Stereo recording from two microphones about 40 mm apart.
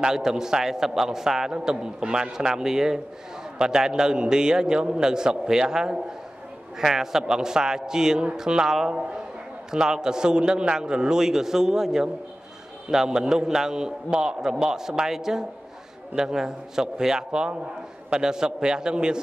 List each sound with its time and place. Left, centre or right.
0.0 s a man's voice: centre